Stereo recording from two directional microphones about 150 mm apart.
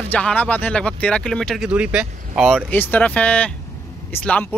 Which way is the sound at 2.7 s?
10° left (ahead or behind).